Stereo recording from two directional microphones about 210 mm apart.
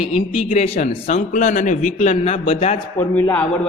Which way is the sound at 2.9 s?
10° left (ahead or behind).